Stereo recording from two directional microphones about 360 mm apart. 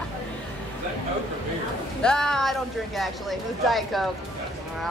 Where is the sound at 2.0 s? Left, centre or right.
Centre.